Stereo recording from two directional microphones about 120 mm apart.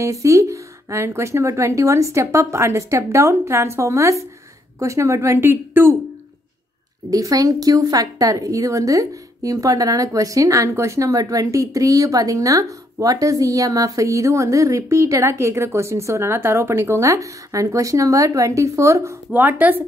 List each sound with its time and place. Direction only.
0.0 s a woman's voice: 25° right (ahead or behind)
7.1 s a woman's voice: 30° right (ahead or behind)